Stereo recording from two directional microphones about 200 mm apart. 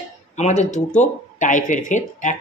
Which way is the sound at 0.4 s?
35° left (ahead or behind).